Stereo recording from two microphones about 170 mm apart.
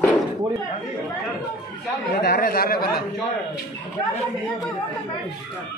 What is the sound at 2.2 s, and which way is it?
Speech, 65° left (ahead or behind).